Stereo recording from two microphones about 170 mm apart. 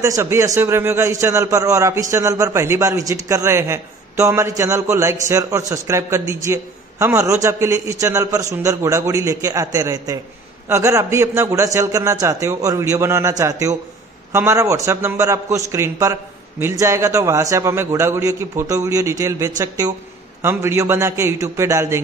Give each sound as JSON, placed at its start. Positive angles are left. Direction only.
{"t": 0.0, "sound": "a man's voice", "side_deg": -15}